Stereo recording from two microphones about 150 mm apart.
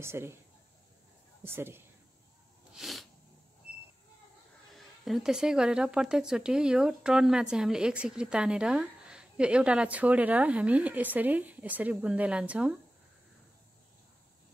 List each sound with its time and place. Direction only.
0.0 s a woman's voice: 15° right (ahead or behind)
1.4 s a woman's voice: 15° right (ahead or behind)
2.7 s sneeze: centre (ahead or behind)
4.7 s a woman's voice: centre (ahead or behind)